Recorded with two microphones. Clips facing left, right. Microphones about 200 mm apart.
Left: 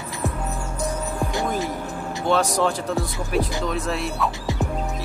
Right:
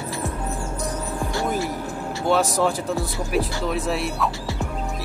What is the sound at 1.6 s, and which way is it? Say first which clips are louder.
Music: even; 20° left (ahead or behind).